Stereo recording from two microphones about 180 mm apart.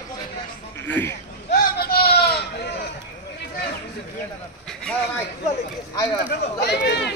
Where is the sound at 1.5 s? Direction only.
55° left (ahead or behind).